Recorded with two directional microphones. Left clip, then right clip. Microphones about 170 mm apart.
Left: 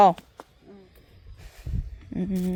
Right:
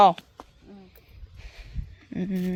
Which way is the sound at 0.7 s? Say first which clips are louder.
Left 1 dB; 30° right (ahead or behind).